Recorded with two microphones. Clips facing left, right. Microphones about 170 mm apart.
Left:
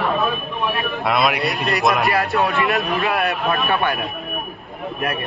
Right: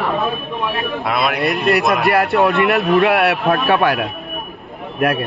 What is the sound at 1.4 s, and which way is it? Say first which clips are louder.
A man's voice: right 4 dB; 55° right (ahead or behind).